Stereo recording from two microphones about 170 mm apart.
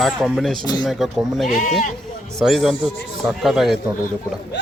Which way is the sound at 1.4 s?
50° left (ahead or behind).